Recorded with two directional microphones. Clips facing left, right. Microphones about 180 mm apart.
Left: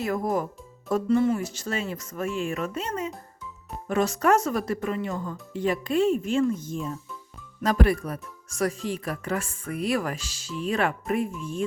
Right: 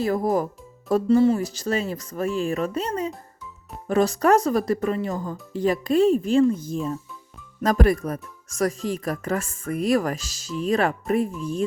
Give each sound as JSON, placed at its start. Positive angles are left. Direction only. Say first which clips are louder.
{"t": 0.0, "sound": "speech", "louder": "right 4 dB", "side_deg": -35}